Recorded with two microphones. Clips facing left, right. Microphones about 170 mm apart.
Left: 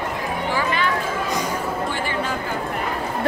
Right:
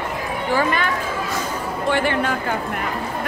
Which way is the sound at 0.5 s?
50° right (ahead or behind).